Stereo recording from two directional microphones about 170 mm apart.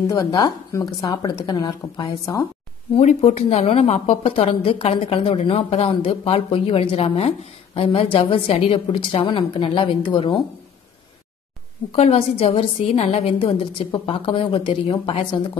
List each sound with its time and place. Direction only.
0.1 s speech: 25° left (ahead or behind)
2.9 s a woman's voice: 40° left (ahead or behind)
11.9 s a woman's voice: 35° left (ahead or behind)